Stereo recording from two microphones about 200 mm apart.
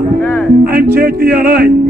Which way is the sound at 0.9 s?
50° right (ahead or behind).